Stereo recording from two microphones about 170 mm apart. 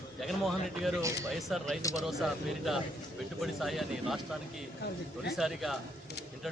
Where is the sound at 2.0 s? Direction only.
Centre (ahead or behind).